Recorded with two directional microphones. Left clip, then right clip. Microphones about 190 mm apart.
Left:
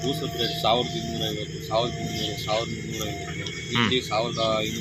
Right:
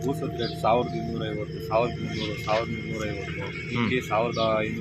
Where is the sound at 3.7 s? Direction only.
Centre (ahead or behind).